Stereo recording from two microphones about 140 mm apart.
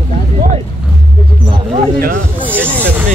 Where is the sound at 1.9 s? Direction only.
90° right.